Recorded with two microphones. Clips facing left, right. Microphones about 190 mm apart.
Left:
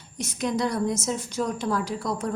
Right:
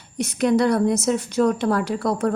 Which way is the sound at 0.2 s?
65° right (ahead or behind).